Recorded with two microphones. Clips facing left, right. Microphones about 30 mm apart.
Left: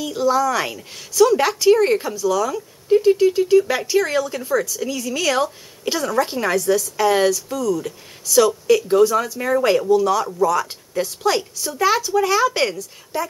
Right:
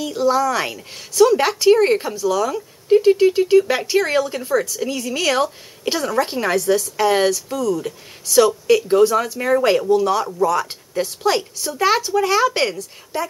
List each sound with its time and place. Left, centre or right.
0.2 s speech: centre
9.8 s speech: right